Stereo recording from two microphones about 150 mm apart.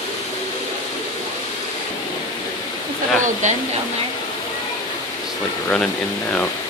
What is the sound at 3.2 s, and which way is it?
Speech, 55° right (ahead or behind).